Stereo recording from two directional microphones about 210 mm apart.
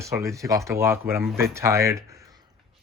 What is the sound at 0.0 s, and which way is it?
Speech, 15° right (ahead or behind).